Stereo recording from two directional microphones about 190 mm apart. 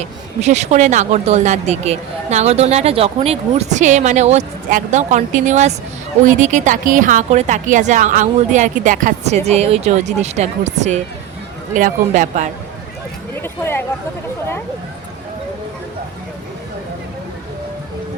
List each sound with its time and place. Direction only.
0.4 s speech: 35° right (ahead or behind)
13.3 s speech: 10° left (ahead or behind)